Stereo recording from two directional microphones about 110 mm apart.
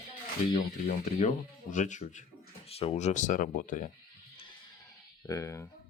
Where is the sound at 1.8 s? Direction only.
90° left.